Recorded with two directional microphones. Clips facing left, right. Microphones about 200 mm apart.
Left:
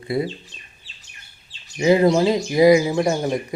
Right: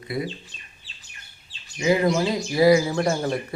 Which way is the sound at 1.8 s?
30° left (ahead or behind).